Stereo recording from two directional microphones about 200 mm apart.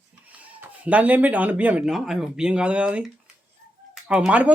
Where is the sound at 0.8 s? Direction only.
5° right (ahead or behind).